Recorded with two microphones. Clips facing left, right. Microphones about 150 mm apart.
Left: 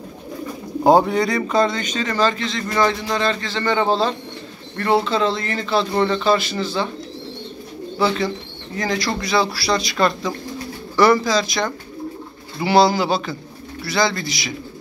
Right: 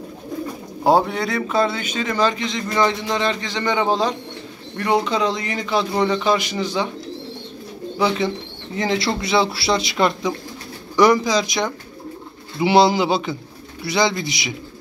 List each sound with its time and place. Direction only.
0.8 s a man's voice: centre (ahead or behind); by 6.9 s 15° right (ahead or behind)
8.7 s a man's voice: 25° right (ahead or behind)